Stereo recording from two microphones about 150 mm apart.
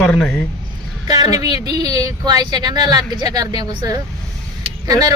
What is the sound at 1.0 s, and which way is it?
A woman's voice, 25° right (ahead or behind).